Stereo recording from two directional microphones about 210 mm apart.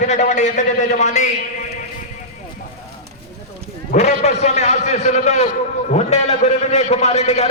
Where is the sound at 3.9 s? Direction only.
30° left (ahead or behind).